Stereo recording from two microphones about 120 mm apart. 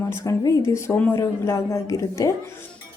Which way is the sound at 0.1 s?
25° left (ahead or behind).